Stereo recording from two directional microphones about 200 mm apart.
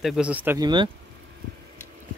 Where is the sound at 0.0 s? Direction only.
5° right (ahead or behind).